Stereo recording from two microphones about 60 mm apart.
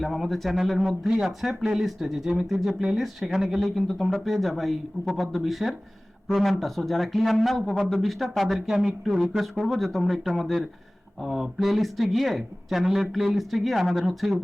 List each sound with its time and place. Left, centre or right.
0.0 s speech: centre